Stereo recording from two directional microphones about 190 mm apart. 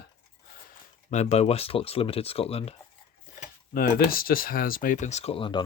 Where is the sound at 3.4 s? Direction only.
50° left (ahead or behind).